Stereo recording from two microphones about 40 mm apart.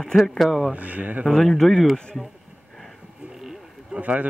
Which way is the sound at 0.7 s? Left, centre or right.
Right.